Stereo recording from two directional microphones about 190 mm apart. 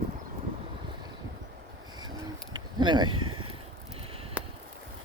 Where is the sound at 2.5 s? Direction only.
25° right (ahead or behind).